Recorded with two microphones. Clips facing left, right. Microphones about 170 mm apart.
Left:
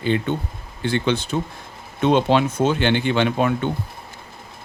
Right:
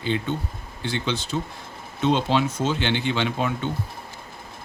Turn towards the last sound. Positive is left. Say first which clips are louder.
# left 5 dB
turn(degrees=55)  # may be behind; listen again after turning